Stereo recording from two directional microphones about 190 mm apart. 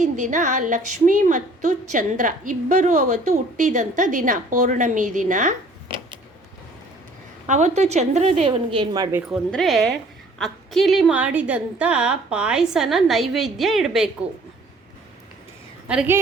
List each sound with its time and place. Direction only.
0.0 s a woman's voice: 40° right (ahead or behind)
7.4 s a woman's voice: 40° right (ahead or behind); by 9.2 s 20° right (ahead or behind)
9.3 s a woman's voice: centre (ahead or behind)
15.9 s a woman's voice: 10° right (ahead or behind)